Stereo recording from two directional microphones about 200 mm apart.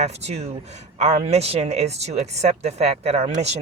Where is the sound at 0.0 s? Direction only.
35° right (ahead or behind).